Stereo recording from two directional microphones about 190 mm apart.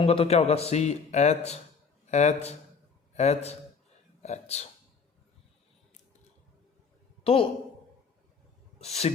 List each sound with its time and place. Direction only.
0.0 s a man's voice: 30° left (ahead or behind)
7.3 s speech: 30° left (ahead or behind)
8.8 s a man's voice: 35° left (ahead or behind)